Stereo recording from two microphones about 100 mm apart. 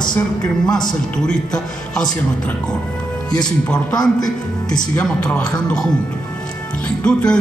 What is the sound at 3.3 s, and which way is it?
Speech, 5° left (ahead or behind).